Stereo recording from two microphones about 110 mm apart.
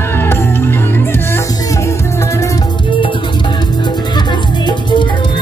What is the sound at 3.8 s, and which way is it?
Music, 40° left (ahead or behind).